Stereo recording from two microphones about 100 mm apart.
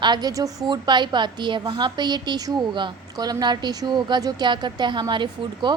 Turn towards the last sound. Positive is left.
turn(degrees=-50)  # may be behind; listen again after turning